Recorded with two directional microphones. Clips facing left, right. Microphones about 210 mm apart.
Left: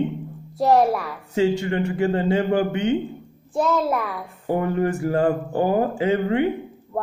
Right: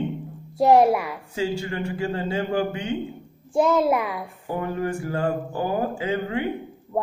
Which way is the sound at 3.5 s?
10° right (ahead or behind).